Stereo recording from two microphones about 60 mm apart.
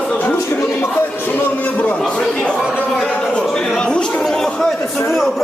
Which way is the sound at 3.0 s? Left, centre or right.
Centre.